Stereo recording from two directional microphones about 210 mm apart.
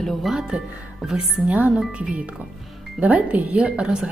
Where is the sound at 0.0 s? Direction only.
Centre (ahead or behind).